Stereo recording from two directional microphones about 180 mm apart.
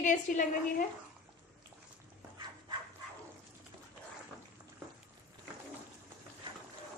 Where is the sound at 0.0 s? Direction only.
45° left (ahead or behind).